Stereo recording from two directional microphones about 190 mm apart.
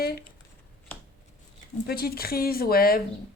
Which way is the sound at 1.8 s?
55° left (ahead or behind).